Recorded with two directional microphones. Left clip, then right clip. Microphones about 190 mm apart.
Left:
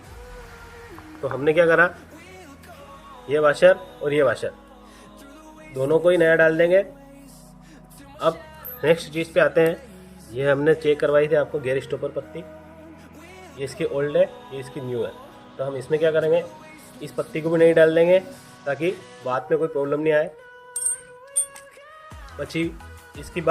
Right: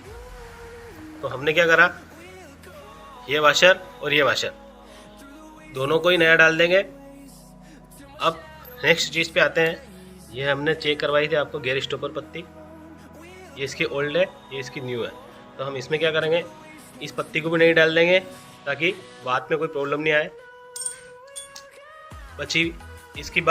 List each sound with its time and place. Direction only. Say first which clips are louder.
1.2 s speech: left 2 dB; 45° left (ahead or behind)
3.2 s speech: even; 35° left (ahead or behind)
5.9 s speech: even; 35° left (ahead or behind)
8.8 s speech: right 1 dB; 45° left (ahead or behind); by 12.5 s 25° left (ahead or behind)
13.6 s speech: even; 30° left (ahead or behind)
22.4 s speech: right 4 dB; 35° left (ahead or behind)